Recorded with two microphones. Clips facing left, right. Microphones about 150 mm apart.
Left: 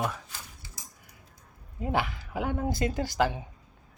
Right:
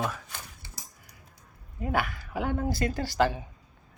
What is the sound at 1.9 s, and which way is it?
A man's voice, 20° left (ahead or behind).